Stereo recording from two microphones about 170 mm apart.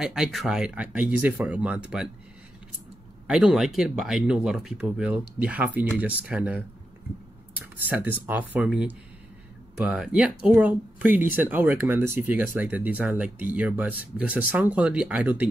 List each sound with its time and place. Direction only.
0.0 s speech: 5° right (ahead or behind)
3.3 s speech: 5° right (ahead or behind)
7.7 s speech: 10° right (ahead or behind)